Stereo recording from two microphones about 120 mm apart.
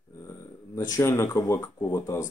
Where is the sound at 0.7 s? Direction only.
25° left (ahead or behind).